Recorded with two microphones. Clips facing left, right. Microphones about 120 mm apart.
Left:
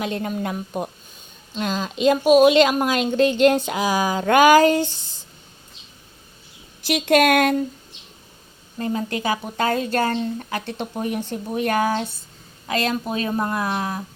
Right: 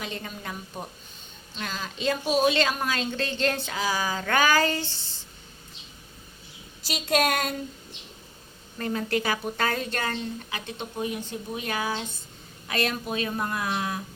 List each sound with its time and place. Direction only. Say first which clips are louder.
0.0 s speech: left 10 dB; 50° left (ahead or behind)
0.4 s speech: left 10 dB; 80° left
1.6 s speech: left 9 dB; 25° left (ahead or behind)
2.2 s speech: left 10 dB; 80° left
2.5 s a woman's voice: left 9 dB; 20° left (ahead or behind)
4.9 s a sound: left 2 dB; 15° left (ahead or behind)
6.8 s a woman's voice: left 8 dB; 70° left (ahead or behind)
8.8 s speech: left 3 dB; 30° left (ahead or behind)
10.7 s speech: left 3 dB; 55° left (ahead or behind)
12.6 s speech: left 5 dB; 30° left (ahead or behind)